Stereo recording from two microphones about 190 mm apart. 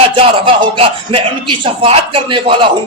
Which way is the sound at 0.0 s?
30° right (ahead or behind).